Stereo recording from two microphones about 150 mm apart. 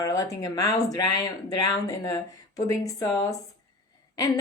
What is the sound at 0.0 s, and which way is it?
Speech, 25° left (ahead or behind).